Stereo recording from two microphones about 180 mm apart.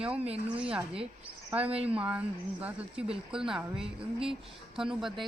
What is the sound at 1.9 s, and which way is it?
Speech, 5° right (ahead or behind).